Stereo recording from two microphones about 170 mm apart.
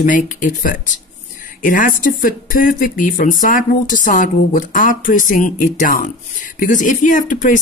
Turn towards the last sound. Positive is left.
turn(degrees=50)  # may be behind; listen again after turning